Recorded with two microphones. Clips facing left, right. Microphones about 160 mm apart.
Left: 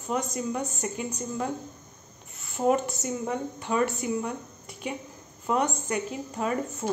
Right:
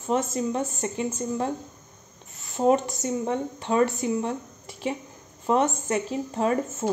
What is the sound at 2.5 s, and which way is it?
A woman's voice, 20° right (ahead or behind).